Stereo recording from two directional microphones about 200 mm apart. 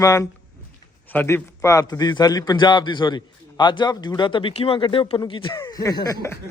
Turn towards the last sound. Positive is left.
turn(degrees=15)  # may be behind; listen again after turning